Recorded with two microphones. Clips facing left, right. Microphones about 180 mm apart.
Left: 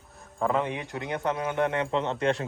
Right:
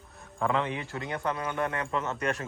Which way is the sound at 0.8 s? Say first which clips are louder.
Left 2 dB; 20° left (ahead or behind).